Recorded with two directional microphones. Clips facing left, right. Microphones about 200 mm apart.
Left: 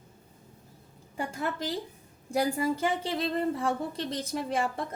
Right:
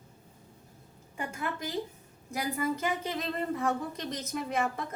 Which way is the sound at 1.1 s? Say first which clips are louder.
Left 3 dB; 35° left (ahead or behind).